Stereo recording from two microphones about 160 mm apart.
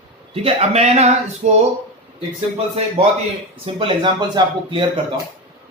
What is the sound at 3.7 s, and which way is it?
Speech, 35° right (ahead or behind).